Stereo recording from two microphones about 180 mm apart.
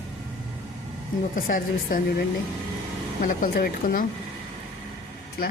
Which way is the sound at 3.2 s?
55° left (ahead or behind).